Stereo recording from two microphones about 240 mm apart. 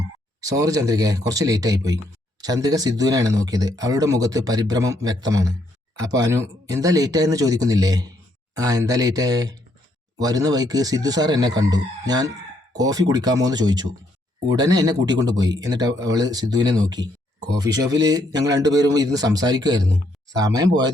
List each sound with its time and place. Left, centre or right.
0.4 s speech: centre